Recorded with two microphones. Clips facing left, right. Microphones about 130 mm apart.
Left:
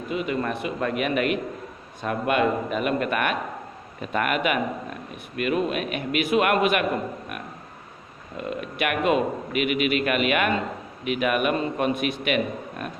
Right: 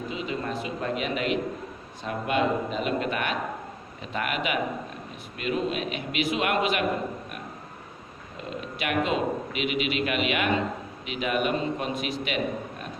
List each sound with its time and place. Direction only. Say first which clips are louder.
0.1 s a man's voice: left 7 dB; 60° left (ahead or behind)
8.4 s a man's voice: left 6 dB; 60° left (ahead or behind)